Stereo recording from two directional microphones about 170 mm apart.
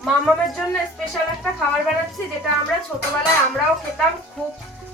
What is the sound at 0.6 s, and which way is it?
Speech, centre (ahead or behind).